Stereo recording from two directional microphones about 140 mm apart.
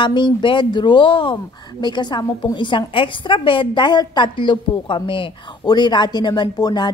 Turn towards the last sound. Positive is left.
turn(degrees=30)  # may be behind; listen again after turning